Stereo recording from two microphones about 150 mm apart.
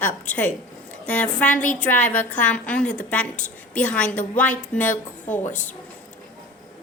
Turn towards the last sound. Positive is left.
turn(degrees=10)  # may be behind; listen again after turning